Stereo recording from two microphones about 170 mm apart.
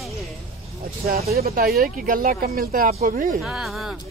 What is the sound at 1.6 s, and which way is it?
Speech, 60° right (ahead or behind).